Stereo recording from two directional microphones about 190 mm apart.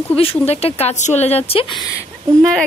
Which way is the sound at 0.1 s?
30° left (ahead or behind).